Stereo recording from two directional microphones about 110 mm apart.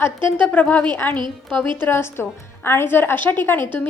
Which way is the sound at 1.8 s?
20° left (ahead or behind).